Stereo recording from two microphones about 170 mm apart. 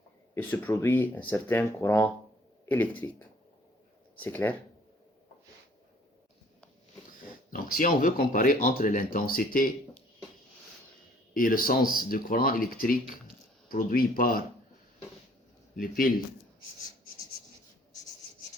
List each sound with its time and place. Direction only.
0.6 s speech: 15° left (ahead or behind)
7.5 s speech: 55° left (ahead or behind)
11.3 s speech: 55° left (ahead or behind)
15.7 s a man's voice: 60° left (ahead or behind)